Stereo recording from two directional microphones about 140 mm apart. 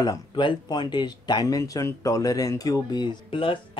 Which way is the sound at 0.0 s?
30° left (ahead or behind).